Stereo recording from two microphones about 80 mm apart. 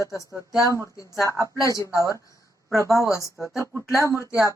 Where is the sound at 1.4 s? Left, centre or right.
Left.